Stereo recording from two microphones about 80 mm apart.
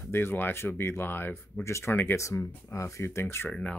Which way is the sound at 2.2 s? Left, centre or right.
Left.